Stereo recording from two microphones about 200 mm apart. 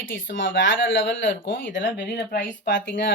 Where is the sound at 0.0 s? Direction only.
70° left (ahead or behind).